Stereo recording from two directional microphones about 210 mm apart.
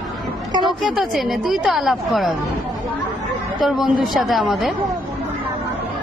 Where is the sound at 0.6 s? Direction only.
Centre (ahead or behind).